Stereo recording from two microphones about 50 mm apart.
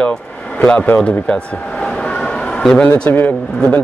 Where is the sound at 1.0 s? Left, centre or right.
Left.